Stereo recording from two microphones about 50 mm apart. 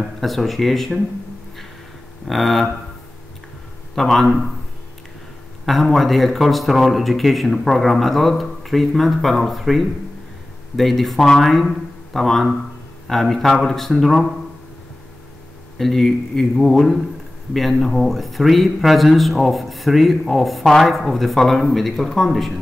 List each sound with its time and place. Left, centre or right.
0.0 s speech: centre
2.2 s speech: centre
3.9 s speech: centre
5.7 s speech: centre
15.8 s speech: centre